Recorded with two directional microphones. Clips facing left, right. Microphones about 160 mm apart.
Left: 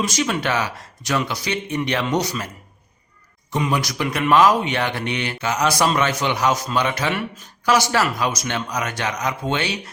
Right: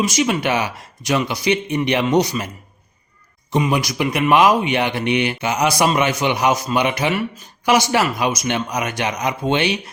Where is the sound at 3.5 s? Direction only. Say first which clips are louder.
Right 3 dB; 15° right (ahead or behind).